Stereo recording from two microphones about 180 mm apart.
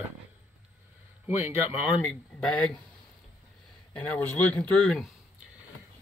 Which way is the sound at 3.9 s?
10° left (ahead or behind).